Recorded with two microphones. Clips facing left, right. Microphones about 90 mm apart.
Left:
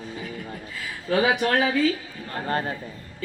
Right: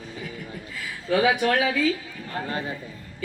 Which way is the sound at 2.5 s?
50° left (ahead or behind).